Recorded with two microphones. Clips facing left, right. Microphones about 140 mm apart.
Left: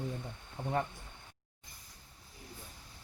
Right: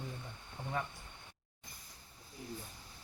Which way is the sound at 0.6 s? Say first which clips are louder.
Left 6 dB; 20° left (ahead or behind).